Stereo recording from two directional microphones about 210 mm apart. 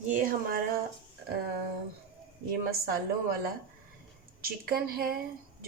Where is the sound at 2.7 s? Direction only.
45° right (ahead or behind).